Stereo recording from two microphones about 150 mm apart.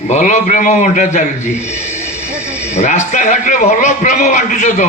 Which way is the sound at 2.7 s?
50° left (ahead or behind).